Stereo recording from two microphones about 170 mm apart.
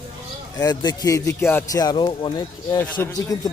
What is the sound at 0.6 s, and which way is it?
A man's voice, 25° left (ahead or behind).